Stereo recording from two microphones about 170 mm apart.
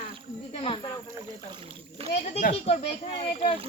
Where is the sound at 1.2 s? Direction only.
25° right (ahead or behind).